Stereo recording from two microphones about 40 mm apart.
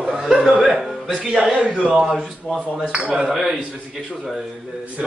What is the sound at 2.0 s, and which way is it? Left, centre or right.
Speech, centre.